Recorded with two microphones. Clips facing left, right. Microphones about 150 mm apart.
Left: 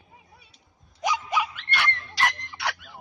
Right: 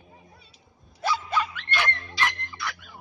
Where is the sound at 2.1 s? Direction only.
70° left (ahead or behind).